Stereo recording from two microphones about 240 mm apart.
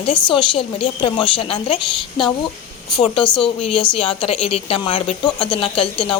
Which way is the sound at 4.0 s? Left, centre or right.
Left.